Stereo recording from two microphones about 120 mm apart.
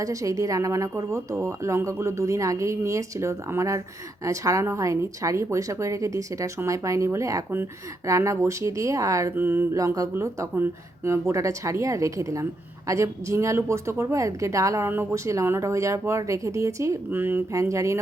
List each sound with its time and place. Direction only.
0.0 s a woman's voice: 30° right (ahead or behind)